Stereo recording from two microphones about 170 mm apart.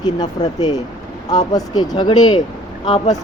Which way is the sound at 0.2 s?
25° left (ahead or behind).